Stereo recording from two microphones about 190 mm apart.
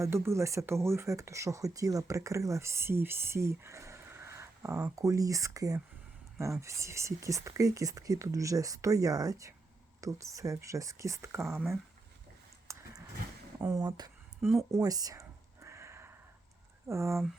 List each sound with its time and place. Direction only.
0.0 s speech: 15° right (ahead or behind)
11.4 s speech: centre (ahead or behind)
12.7 s horse: 15° right (ahead or behind)
13.6 s a sound: 20° right (ahead or behind)
16.9 s speech: 15° right (ahead or behind)